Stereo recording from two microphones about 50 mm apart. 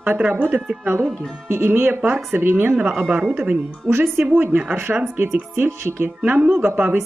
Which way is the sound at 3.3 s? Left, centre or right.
Right.